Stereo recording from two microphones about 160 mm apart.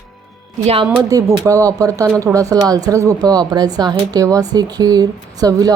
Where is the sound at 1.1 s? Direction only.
20° right (ahead or behind).